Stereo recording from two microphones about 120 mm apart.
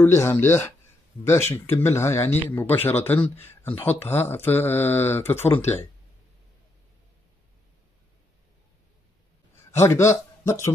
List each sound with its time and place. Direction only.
0.0 s speech: 20° left (ahead or behind)
9.7 s a man's voice: 20° left (ahead or behind)